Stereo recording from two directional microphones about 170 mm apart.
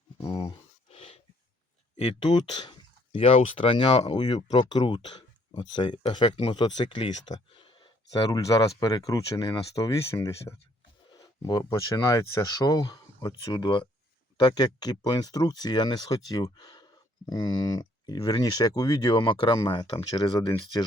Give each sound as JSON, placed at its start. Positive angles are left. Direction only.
{"t": 0.2, "sound": "a sound", "side_deg": 20}
{"t": 0.9, "sound": "wheeze", "side_deg": 35}
{"t": 2.0, "sound": "speech", "side_deg": 30}